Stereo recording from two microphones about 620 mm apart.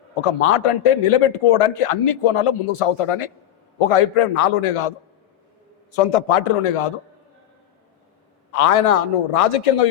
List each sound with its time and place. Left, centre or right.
0.1 s a man's voice: left
8.5 s a man's voice: left